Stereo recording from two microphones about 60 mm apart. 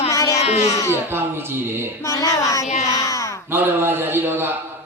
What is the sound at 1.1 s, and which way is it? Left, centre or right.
Speech, right.